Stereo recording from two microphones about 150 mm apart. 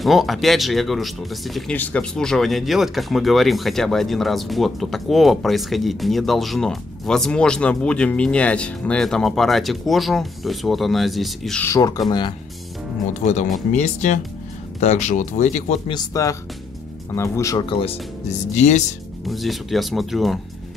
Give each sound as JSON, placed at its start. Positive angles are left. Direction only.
{"t": 0.0, "sound": "speech", "side_deg": 0}
{"t": 11.6, "sound": "speech", "side_deg": 20}
{"t": 12.1, "sound": "speech", "side_deg": 30}
{"t": 13.2, "sound": "speech", "side_deg": 50}
{"t": 15.9, "sound": "speech", "side_deg": 25}
{"t": 17.6, "sound": "speech", "side_deg": 35}
{"t": 18.5, "sound": "speech", "side_deg": 50}
{"t": 19.2, "sound": "speech", "side_deg": 0}